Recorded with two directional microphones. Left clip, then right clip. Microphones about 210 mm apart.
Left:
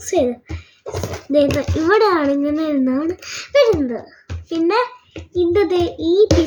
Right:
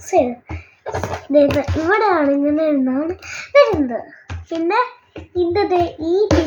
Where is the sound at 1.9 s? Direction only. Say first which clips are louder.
Left 1 dB; 55° left (ahead or behind).